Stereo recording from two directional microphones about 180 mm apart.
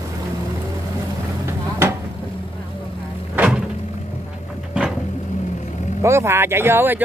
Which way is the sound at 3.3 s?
5° right (ahead or behind).